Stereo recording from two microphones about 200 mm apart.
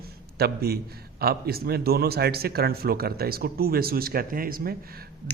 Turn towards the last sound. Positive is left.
turn(degrees=-50)  # may be behind; listen again after turning